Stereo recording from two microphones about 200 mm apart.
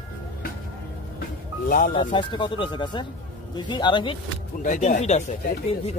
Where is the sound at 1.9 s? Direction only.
25° left (ahead or behind).